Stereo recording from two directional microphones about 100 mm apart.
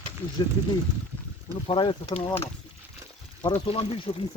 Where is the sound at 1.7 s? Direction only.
60° left (ahead or behind).